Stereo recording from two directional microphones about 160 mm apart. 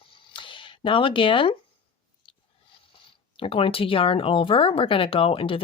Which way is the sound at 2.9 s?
35° left (ahead or behind).